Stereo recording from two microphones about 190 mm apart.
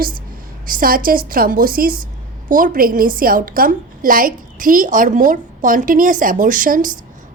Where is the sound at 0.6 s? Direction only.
45° right (ahead or behind).